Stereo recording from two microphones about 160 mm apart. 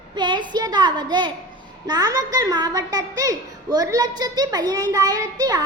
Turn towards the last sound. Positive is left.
turn(degrees=-25)  # may be behind; listen again after turning